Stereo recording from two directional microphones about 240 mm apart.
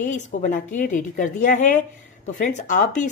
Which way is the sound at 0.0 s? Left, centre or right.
Left.